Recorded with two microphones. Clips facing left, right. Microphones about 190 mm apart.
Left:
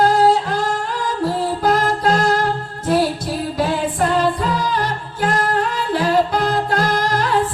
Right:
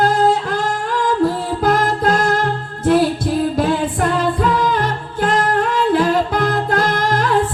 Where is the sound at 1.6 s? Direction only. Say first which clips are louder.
Right 2 dB; 50° right (ahead or behind).